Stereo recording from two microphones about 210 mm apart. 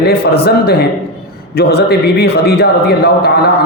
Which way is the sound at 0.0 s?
50° left (ahead or behind).